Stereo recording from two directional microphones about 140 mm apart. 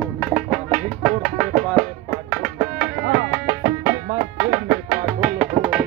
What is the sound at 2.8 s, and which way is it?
Music, 15° right (ahead or behind).